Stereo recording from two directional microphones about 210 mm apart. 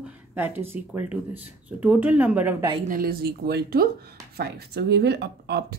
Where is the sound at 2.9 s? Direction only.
45° right (ahead or behind).